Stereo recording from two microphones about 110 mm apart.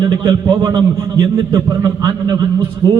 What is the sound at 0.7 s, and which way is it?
A man's voice, 45° right (ahead or behind).